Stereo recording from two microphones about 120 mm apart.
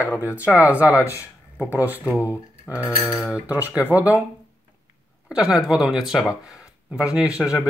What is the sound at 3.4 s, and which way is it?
Speech, 10° right (ahead or behind).